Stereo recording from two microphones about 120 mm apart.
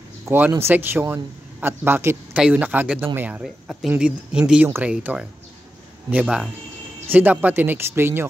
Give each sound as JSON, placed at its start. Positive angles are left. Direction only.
{"t": 0.2, "sound": "speech", "side_deg": -20}
{"t": 3.4, "sound": "speech", "side_deg": -5}